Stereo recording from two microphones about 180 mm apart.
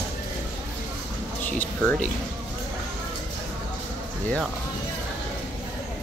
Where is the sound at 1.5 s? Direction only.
5° left (ahead or behind).